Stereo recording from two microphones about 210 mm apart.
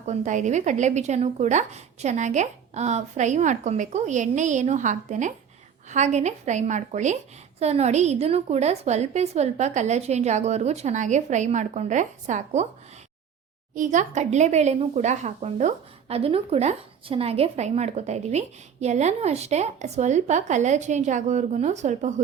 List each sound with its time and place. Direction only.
0.0 s speech: 35° right (ahead or behind)
13.7 s speech: 35° right (ahead or behind)